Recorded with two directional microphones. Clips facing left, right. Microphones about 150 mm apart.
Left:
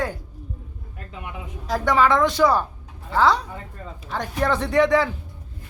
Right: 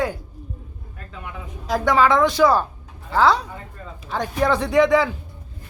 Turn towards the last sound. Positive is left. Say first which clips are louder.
# right 2 dB
turn(degrees=-10)  # may be behind; listen again after turning